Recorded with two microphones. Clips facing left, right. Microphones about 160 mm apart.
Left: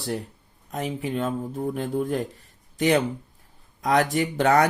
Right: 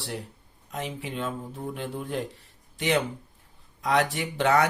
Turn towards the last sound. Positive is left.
turn(degrees=45)  # may be behind; listen again after turning